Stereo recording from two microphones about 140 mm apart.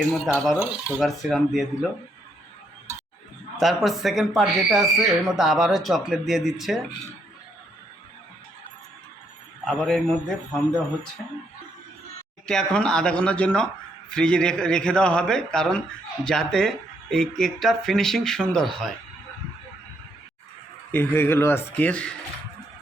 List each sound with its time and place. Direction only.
0.1 s speech: centre (ahead or behind)
3.6 s speech: centre (ahead or behind)
9.6 s speech: centre (ahead or behind)
12.5 s speech: 5° left (ahead or behind)
20.9 s speech: 15° left (ahead or behind)